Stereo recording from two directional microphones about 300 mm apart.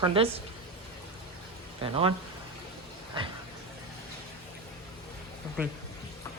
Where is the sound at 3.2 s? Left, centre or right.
Centre.